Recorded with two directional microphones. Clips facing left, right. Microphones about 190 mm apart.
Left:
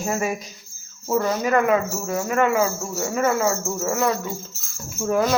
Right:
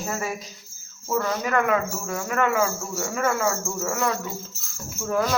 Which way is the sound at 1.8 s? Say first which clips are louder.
Left 4 dB; 10° left (ahead or behind).